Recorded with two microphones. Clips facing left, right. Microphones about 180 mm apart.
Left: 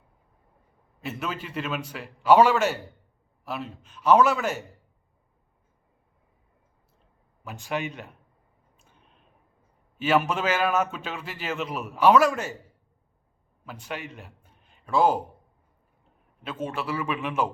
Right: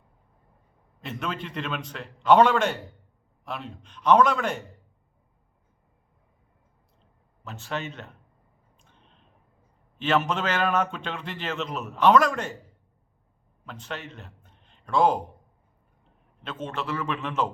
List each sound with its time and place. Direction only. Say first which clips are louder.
1.0 s a man's voice: even; 5° left (ahead or behind)
7.4 s a man's voice: left 2 dB; 10° left (ahead or behind)
8.8 s a sound: even; 10° left (ahead or behind)
10.0 s a man's voice: left 1 dB; 10° left (ahead or behind)
13.7 s a man's voice: left 1 dB; 10° left (ahead or behind)
16.4 s a man's voice: left 2 dB; 10° left (ahead or behind)